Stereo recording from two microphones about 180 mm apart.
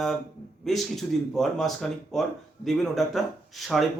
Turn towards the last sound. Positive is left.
turn(degrees=0)  # may be behind; listen again after turning